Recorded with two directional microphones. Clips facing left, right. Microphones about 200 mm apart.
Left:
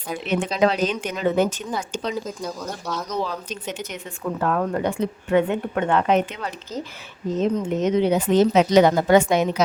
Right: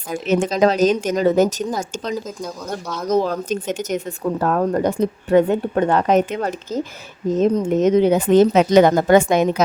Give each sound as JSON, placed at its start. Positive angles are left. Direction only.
{"t": 0.1, "sound": "speech", "side_deg": -45}
{"t": 2.2, "sound": "speech", "side_deg": 0}
{"t": 3.1, "sound": "a woman's voice", "side_deg": -50}